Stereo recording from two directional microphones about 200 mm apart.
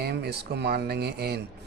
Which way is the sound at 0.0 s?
55° right (ahead or behind).